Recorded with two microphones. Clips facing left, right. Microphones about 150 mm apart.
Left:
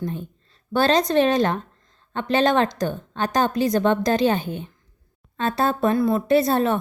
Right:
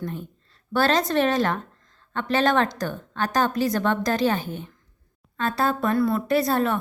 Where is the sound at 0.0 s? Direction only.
20° left (ahead or behind).